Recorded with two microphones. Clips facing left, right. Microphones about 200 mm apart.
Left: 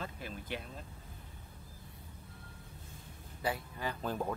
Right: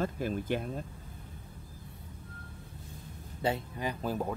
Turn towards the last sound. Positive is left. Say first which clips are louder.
# right 3 dB
turn(degrees=-10)  # may be behind; listen again after turning